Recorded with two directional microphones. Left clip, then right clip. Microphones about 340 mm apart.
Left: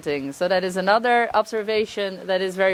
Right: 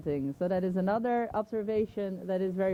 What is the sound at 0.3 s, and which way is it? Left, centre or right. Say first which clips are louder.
Speech: left 12 dB; centre.